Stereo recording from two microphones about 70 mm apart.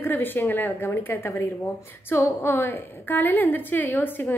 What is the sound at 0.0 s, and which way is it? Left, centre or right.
A woman's voice, left.